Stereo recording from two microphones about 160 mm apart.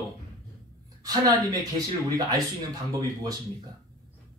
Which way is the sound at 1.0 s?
25° right (ahead or behind).